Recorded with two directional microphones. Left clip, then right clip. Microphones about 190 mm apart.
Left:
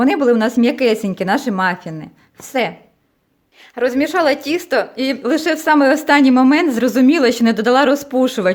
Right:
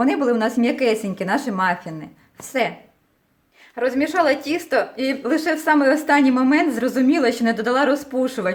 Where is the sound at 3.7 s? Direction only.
40° left (ahead or behind).